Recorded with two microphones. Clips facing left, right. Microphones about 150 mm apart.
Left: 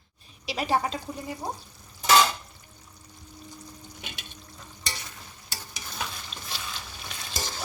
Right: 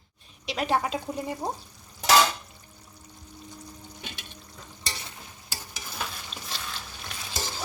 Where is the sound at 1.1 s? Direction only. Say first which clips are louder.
Right 4 dB; 25° right (ahead or behind).